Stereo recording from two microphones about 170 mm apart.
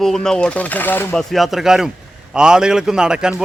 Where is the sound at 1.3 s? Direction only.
Centre (ahead or behind).